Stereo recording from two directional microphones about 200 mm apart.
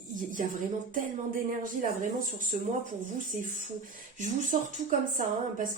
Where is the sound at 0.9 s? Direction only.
40° right (ahead or behind).